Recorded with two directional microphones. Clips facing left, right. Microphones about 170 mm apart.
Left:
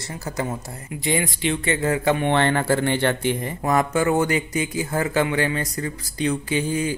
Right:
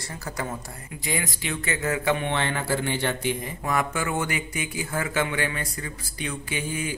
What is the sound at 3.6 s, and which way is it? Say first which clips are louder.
Speech: left 8 dB; 40° left (ahead or behind).